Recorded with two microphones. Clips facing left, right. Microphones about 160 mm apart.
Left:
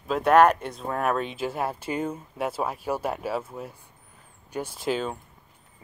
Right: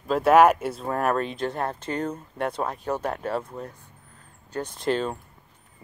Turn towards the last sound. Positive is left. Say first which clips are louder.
# right 2 dB
turn(degrees=0)  # may be behind; listen again after turning